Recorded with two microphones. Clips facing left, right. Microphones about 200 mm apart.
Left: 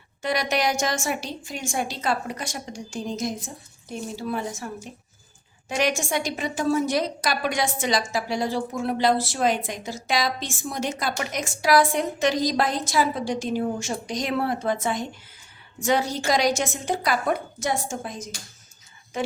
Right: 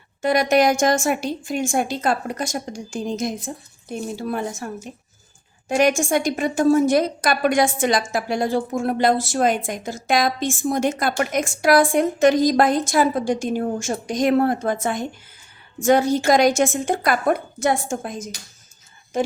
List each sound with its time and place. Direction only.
0.2 s a woman's voice: 50° right (ahead or behind)